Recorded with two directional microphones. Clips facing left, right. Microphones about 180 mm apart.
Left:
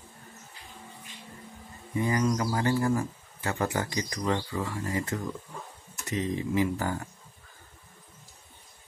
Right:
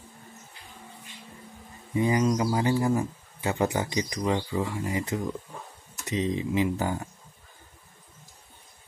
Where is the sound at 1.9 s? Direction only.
20° right (ahead or behind).